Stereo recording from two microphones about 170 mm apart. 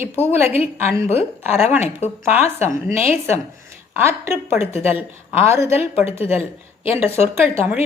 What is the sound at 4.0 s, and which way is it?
A woman's voice, 15° right (ahead or behind).